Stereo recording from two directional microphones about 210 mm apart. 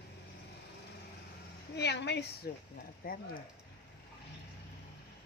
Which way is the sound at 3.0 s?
45° left (ahead or behind).